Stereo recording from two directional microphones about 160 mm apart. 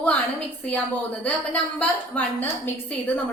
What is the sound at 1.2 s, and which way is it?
A woman's voice, 10° left (ahead or behind).